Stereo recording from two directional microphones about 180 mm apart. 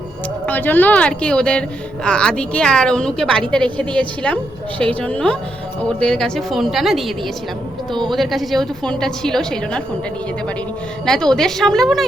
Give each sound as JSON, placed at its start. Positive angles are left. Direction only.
{"t": 0.4, "sound": "a woman's voice", "side_deg": 10}
{"t": 8.1, "sound": "a woman's voice", "side_deg": 0}
{"t": 11.0, "sound": "a woman's voice", "side_deg": 5}